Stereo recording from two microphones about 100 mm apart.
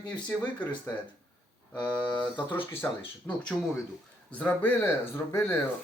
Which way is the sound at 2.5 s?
20° left (ahead or behind).